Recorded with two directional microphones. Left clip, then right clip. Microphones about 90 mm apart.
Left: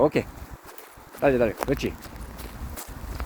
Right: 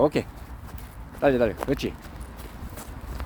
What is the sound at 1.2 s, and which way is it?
Speech, 35° right (ahead or behind).